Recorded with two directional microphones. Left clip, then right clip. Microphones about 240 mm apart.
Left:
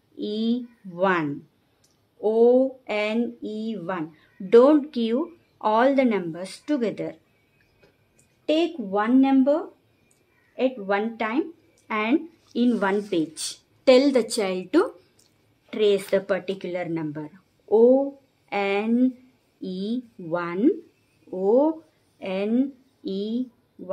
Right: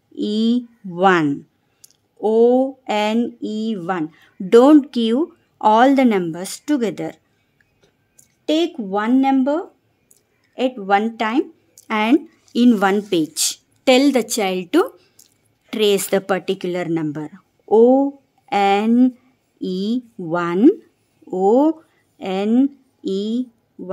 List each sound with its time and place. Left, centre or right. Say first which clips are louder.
0.1 s speech: right 7 dB; right
8.5 s speech: right 4 dB; right